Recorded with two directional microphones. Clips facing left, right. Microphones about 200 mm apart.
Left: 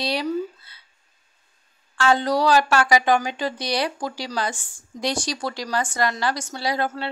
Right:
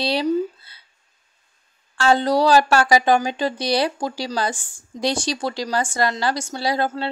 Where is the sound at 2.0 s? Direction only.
30° right (ahead or behind).